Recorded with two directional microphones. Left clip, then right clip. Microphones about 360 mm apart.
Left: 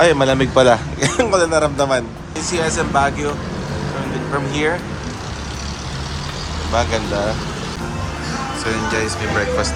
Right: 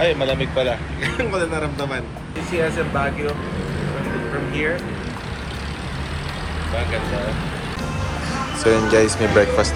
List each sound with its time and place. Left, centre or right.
0.0 s speech: left
1.1 s speech: centre
8.6 s speech: centre